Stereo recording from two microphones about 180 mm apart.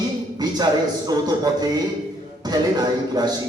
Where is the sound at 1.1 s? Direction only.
20° right (ahead or behind).